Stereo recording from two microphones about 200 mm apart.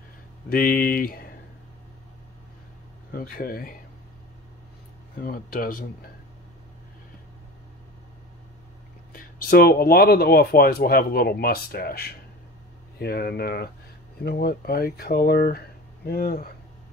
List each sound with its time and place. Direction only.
0.5 s speech: 45° left (ahead or behind)
3.1 s speech: 45° left (ahead or behind)
5.2 s speech: 45° left (ahead or behind)
9.1 s speech: 50° left (ahead or behind)